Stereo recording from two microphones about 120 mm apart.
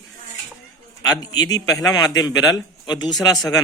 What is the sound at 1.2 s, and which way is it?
A man's voice, 35° left (ahead or behind).